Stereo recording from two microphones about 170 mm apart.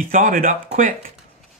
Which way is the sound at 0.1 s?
50° right (ahead or behind).